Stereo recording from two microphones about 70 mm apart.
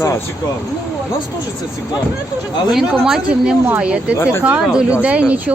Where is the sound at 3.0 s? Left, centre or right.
Centre.